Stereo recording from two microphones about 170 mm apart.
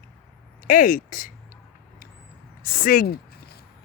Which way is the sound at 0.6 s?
55° left (ahead or behind).